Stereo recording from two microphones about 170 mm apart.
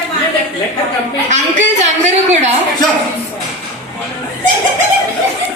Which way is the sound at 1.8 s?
40° right (ahead or behind).